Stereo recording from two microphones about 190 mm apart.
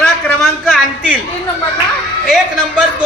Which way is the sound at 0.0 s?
Centre (ahead or behind).